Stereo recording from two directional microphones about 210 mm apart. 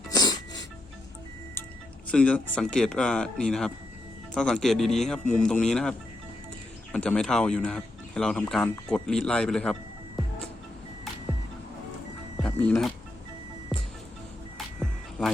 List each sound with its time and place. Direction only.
0.1 s music: 20° left (ahead or behind)
2.0 s speech: 5° left (ahead or behind)
6.9 s speech: 5° left (ahead or behind)
12.4 s music: 5° left (ahead or behind)